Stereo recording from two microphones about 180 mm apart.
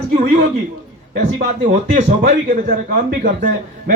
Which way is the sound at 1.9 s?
50° right (ahead or behind).